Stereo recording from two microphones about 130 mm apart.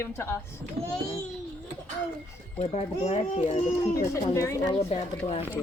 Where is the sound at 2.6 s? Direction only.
50° left (ahead or behind).